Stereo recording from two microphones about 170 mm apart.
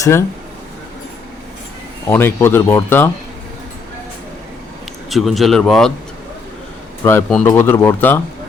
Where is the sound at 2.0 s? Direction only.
15° left (ahead or behind).